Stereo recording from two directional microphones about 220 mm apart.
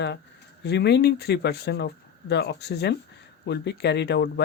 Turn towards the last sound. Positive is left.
turn(degrees=50)  # may be behind; listen again after turning